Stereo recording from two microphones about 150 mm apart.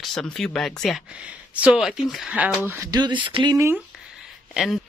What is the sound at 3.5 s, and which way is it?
Speech, 20° right (ahead or behind).